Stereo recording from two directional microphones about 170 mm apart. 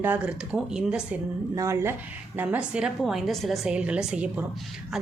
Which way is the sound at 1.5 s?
20° right (ahead or behind).